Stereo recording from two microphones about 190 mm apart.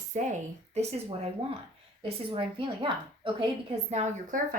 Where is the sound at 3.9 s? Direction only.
40° right (ahead or behind).